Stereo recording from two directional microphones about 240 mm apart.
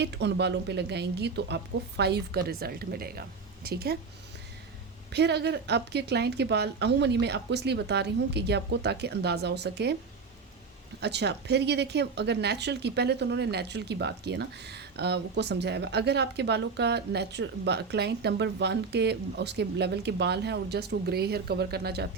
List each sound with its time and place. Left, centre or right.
0.0 s a woman's voice: right
5.1 s a woman's voice: right
11.0 s a woman's voice: right